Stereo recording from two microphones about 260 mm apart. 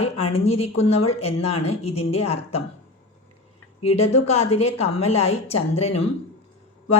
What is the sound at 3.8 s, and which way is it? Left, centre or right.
A woman's voice, left.